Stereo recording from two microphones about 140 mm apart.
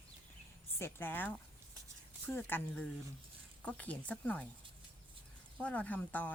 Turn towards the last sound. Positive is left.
turn(degrees=10)  # may be behind; listen again after turning